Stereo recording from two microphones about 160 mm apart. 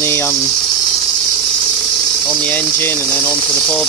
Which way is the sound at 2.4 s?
10° left (ahead or behind).